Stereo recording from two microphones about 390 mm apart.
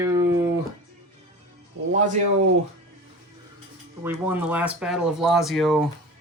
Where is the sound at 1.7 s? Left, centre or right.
Right.